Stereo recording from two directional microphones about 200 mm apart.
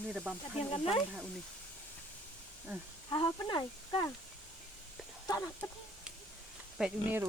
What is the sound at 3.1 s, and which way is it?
Speech, 25° left (ahead or behind).